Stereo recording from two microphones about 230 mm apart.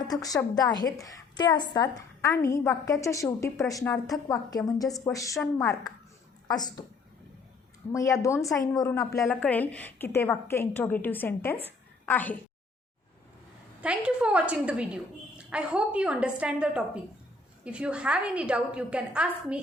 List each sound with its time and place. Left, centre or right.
0.0 s a woman's voice: centre
7.9 s a woman's voice: centre
11.6 s a sound: centre
13.8 s a woman's voice: centre